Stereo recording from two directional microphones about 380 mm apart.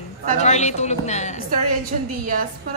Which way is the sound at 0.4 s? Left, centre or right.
Centre.